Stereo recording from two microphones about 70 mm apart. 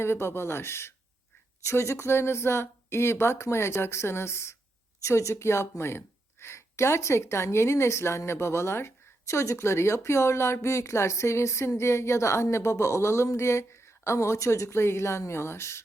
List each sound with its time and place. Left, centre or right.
0.0 s speech: left